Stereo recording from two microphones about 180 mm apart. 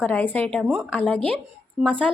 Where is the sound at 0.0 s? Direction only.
10° left (ahead or behind).